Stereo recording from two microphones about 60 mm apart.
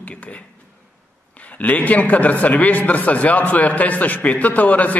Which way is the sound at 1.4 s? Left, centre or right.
Left.